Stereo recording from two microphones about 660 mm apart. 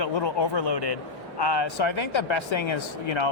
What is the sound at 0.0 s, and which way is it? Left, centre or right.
Speech, left.